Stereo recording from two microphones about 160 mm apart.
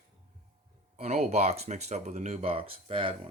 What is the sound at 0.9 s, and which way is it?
Speech, 40° right (ahead or behind).